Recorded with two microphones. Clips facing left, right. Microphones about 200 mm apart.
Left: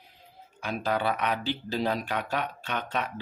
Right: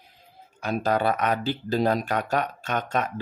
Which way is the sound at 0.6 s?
45° right (ahead or behind).